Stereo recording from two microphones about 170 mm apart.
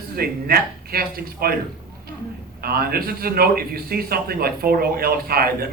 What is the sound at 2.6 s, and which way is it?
A man's voice, 60° right (ahead or behind).